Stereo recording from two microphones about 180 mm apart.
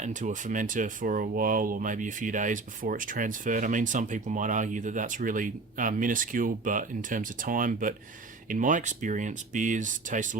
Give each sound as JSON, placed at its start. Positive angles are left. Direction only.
{"t": 0.0, "sound": "speech", "side_deg": -45}